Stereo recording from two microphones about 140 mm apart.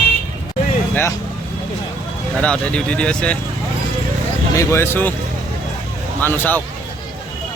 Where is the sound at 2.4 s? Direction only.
10° left (ahead or behind).